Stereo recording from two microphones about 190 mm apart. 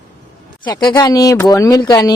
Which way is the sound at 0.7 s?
20° left (ahead or behind).